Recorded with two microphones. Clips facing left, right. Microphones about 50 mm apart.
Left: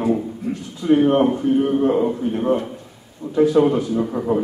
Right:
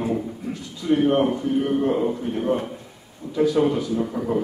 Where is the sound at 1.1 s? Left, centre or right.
Left.